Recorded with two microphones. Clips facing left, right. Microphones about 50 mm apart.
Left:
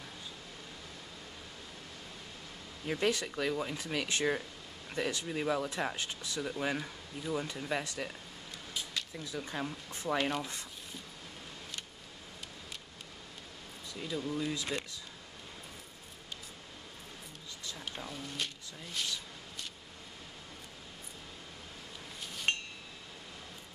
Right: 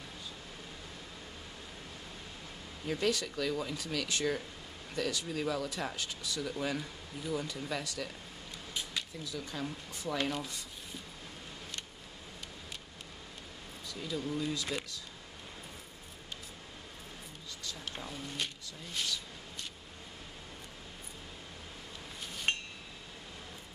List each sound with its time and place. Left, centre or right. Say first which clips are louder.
2.9 s speech: even; left
9.2 s speech: left 3 dB; left
13.8 s speech: even; left
14.2 s speech: even; centre
14.5 s speech: even; left
17.9 s speech: even; centre
22.2 s a sound: even; centre